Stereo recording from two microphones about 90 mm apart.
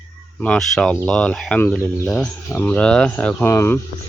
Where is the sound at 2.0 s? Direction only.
5° left (ahead or behind).